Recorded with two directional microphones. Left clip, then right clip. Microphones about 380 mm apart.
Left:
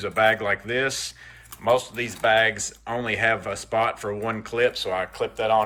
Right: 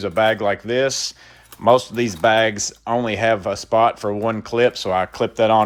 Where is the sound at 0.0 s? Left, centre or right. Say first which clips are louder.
Right 3 dB; centre.